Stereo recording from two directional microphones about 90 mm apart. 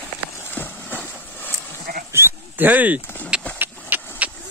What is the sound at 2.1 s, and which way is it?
Dog, 25° right (ahead or behind).